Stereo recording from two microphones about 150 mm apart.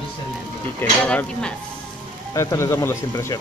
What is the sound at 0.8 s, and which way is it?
Speech, 10° left (ahead or behind).